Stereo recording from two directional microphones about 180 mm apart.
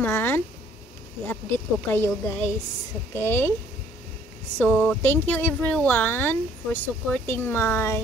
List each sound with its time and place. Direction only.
0.0 s a sound: 10° left (ahead or behind)
1.2 s speech: 10° left (ahead or behind)
4.6 s speech: 5° left (ahead or behind)